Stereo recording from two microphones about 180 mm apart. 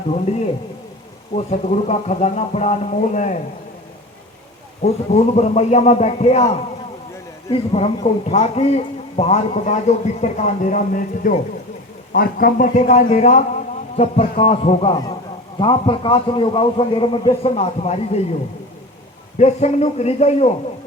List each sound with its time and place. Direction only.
0.1 s a man's voice: 35° left (ahead or behind)
1.5 s a man's voice: 40° left (ahead or behind)
4.8 s a man's voice: 35° left (ahead or behind)
19.4 s a man's voice: 40° left (ahead or behind)